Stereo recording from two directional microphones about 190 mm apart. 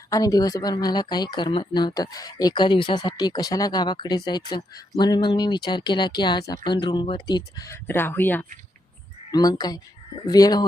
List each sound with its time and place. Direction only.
0.1 s speech: 20° left (ahead or behind)
9.3 s speech: 20° left (ahead or behind)